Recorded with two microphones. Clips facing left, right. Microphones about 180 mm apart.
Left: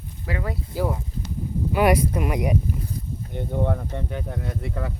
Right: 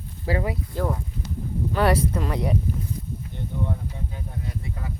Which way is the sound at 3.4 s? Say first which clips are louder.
Left 6 dB; 60° left (ahead or behind).